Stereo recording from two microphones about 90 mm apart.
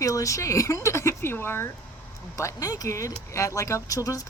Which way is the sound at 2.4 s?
40° left (ahead or behind).